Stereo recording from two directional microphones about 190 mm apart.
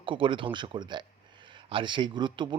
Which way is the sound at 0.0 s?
25° right (ahead or behind).